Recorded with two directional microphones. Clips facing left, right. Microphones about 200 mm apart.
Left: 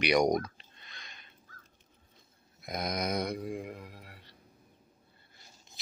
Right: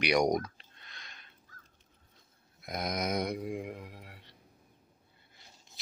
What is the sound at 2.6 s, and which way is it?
Speech, centre (ahead or behind).